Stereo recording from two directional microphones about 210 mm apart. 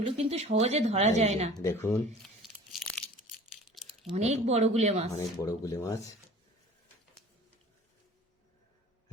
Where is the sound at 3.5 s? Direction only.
Centre (ahead or behind).